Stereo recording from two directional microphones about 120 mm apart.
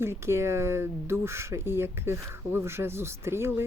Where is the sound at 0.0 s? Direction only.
20° right (ahead or behind).